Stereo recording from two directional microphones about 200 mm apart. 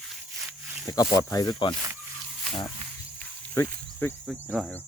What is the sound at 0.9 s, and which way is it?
Speech, 15° left (ahead or behind).